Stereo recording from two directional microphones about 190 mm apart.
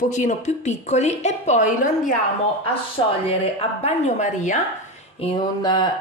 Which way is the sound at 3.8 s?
40° left (ahead or behind).